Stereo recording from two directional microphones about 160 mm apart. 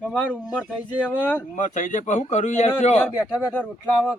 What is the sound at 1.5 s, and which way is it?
Speech, 50° left (ahead or behind).